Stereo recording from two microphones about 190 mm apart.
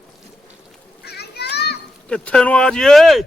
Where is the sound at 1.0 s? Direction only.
60° left (ahead or behind).